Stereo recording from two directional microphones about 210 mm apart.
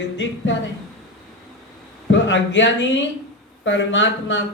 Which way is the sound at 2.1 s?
60° left (ahead or behind).